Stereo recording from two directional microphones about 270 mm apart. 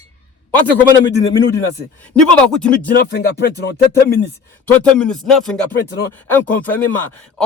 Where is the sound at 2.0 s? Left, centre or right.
Centre.